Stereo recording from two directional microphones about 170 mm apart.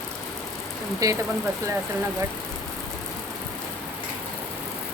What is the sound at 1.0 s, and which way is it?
Speech, 20° right (ahead or behind).